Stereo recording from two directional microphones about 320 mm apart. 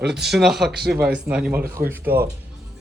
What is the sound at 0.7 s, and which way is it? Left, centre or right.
Speech, right.